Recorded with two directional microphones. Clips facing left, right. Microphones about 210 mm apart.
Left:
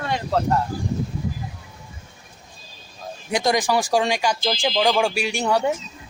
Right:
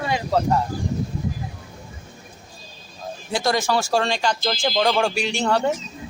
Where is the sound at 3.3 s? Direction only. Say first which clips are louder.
Left 1 dB; 20° left (ahead or behind).